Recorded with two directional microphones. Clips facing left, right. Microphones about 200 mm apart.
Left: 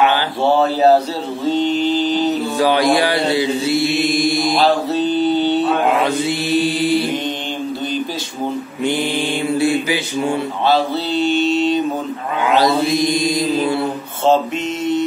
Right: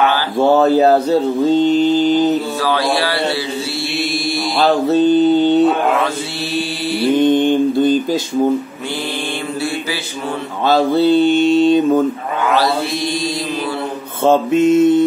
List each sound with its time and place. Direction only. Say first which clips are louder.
0.4 s mantra: right 4 dB; 45° right (ahead or behind)
2.6 s mantra: left 3 dB; 15° left (ahead or behind)
4.9 s mantra: right 5 dB; 45° right (ahead or behind)
7.2 s mantra: right 12 dB; 55° right (ahead or behind)
10.7 s mantra: right 7 dB; 50° right (ahead or behind)
12.5 s mantra: left 5 dB; 15° left (ahead or behind)
14.2 s mantra: right 4 dB; 50° right (ahead or behind)